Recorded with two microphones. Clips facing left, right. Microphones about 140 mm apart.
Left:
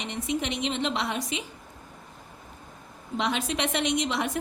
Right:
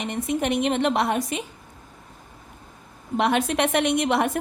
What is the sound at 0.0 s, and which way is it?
A woman's voice, 50° right (ahead or behind).